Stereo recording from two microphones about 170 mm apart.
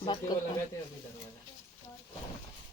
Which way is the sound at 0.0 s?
30° left (ahead or behind).